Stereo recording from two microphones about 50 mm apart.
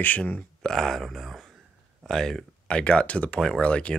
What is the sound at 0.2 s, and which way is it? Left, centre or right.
Speech, left.